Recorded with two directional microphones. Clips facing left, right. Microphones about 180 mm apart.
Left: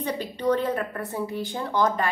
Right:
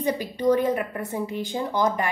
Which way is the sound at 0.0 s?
10° right (ahead or behind).